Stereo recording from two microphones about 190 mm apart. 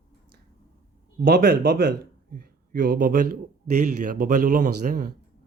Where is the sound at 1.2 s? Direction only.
55° right (ahead or behind).